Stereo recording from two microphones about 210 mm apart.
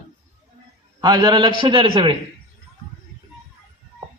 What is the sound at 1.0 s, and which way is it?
A man's voice, 20° right (ahead or behind).